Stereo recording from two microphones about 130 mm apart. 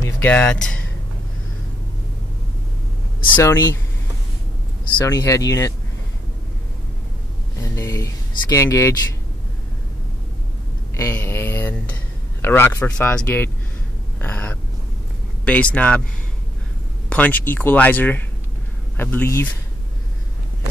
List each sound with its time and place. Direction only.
0.0 s speech: 15° left (ahead or behind)
3.3 s speech: 20° left (ahead or behind)
5.0 s speech: 25° left (ahead or behind)
7.6 s speech: 25° left (ahead or behind)
11.0 s speech: 20° left (ahead or behind)
17.1 s speech: 10° left (ahead or behind)